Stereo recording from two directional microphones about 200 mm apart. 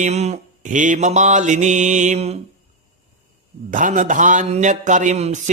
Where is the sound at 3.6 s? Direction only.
40° right (ahead or behind).